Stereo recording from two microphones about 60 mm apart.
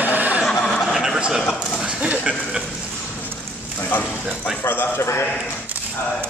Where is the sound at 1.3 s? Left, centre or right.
Centre.